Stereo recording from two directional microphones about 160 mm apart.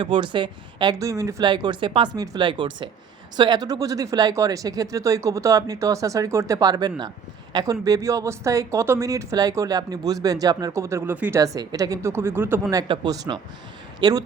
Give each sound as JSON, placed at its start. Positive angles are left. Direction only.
{"t": 0.0, "sound": "speech", "side_deg": -30}
{"t": 12.9, "sound": "speech", "side_deg": -30}